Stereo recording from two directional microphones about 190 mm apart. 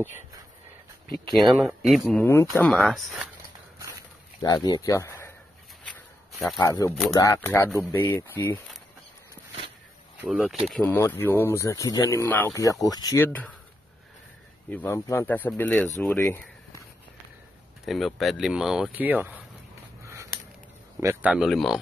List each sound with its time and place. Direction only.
1.3 s speech: centre (ahead or behind)
2.7 s speech: centre (ahead or behind)
4.4 s speech: 20° left (ahead or behind)
6.6 s speech: 15° left (ahead or behind)
10.2 s speech: centre (ahead or behind)
10.7 s speech: 10° left (ahead or behind)
14.7 s speech: 10° left (ahead or behind)
17.8 s speech: centre (ahead or behind)
20.0 s a sound: 15° right (ahead or behind)
21.0 s speech: 10° right (ahead or behind)